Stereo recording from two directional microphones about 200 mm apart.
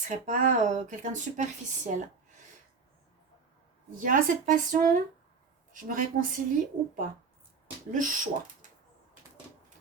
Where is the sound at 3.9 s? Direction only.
40° right (ahead or behind).